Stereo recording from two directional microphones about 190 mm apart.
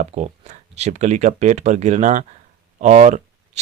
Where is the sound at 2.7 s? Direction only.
40° right (ahead or behind).